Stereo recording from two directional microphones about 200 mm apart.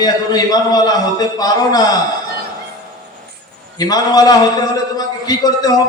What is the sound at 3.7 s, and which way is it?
A man's voice, 20° left (ahead or behind).